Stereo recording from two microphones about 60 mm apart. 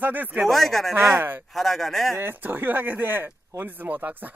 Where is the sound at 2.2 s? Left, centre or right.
Right.